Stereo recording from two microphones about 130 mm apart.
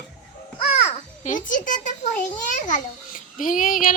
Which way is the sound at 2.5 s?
80° left.